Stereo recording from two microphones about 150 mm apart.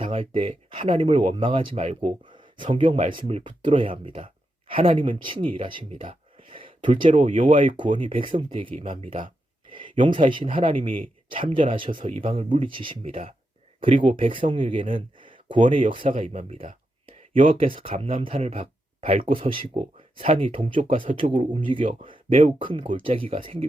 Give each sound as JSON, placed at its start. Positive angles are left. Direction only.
{"t": 0.0, "sound": "speech", "side_deg": -40}
{"t": 7.1, "sound": "speech", "side_deg": -55}
{"t": 7.3, "sound": "speech", "side_deg": -35}
{"t": 16.1, "sound": "speech", "side_deg": -55}
{"t": 17.9, "sound": "speech", "side_deg": -40}